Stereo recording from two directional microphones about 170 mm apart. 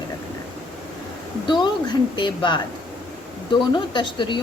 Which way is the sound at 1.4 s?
25° left (ahead or behind).